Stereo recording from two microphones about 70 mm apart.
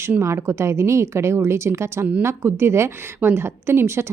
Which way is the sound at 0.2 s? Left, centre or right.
Right.